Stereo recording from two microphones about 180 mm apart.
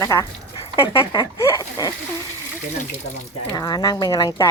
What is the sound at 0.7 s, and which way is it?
Speech, 30° left (ahead or behind).